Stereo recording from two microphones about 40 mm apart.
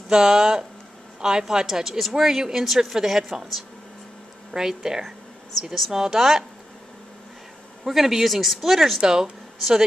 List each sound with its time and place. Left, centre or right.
0.1 s speech: centre
4.5 s speech: centre
5.6 s speech: centre
7.8 s speech: centre
9.0 s speech: centre